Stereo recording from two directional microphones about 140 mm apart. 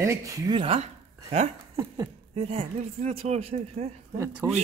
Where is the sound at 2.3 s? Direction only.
50° right (ahead or behind).